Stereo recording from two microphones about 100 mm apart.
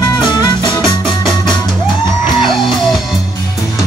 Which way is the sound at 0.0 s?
45° left (ahead or behind).